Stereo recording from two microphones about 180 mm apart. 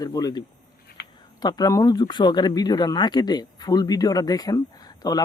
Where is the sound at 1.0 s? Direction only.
65° left (ahead or behind).